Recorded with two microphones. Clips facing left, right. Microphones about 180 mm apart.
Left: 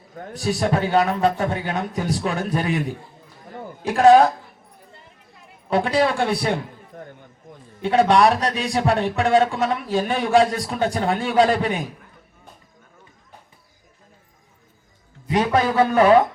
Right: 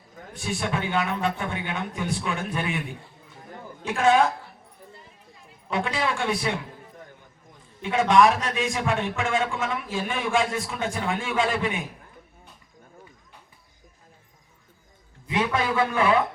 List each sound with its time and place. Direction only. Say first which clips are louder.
0.3 s a man's voice: left 7 dB; 35° left (ahead or behind)
5.7 s a man's voice: left 8 dB; 35° left (ahead or behind)
7.8 s a man's voice: left 3 dB; 35° left (ahead or behind)
15.3 s a man's voice: left 6 dB; 40° left (ahead or behind)